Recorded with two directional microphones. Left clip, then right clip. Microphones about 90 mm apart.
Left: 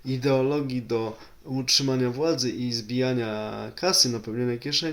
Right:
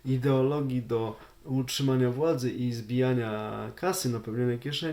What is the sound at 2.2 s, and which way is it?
Speech, 30° right (ahead or behind).